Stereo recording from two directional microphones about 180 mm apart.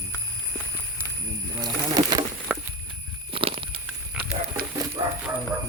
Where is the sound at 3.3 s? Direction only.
30° right (ahead or behind).